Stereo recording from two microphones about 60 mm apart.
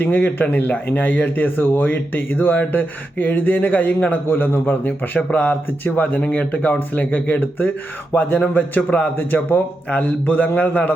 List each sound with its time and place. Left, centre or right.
0.0 s a man's voice: left